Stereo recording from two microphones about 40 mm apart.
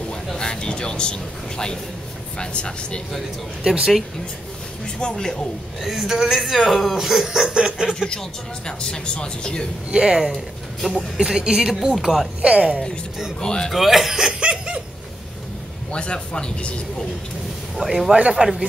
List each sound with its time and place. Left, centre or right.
0.4 s a sound: centre
2.3 s speech: left
5.2 s speech: centre
5.8 s speech: centre
8.6 s speech: centre
9.8 s speech: centre
10.3 s speech: centre
11.2 s speech: centre
12.4 s speech: right
13.4 s speech: left
13.7 s speech: centre
14.4 s laughter: right
15.9 s speech: left
17.7 s a man's voice: centre